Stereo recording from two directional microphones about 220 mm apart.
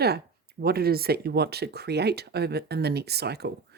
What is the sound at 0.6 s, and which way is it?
Speech, 45° right (ahead or behind).